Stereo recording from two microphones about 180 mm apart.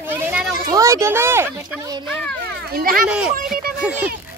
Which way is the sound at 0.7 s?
20° right (ahead or behind).